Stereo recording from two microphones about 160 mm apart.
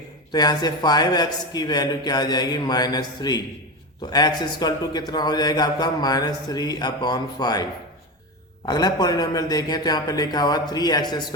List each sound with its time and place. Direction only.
0.3 s a man's voice: 25° left (ahead or behind)
8.6 s a man's voice: 25° left (ahead or behind)